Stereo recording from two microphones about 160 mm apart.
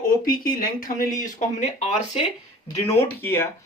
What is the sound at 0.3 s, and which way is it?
Speech, 60° left (ahead or behind).